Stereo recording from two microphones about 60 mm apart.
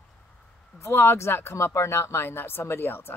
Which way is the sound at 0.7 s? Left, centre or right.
Left.